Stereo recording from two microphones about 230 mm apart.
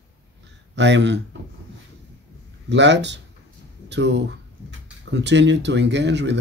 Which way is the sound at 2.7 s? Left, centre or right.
Right.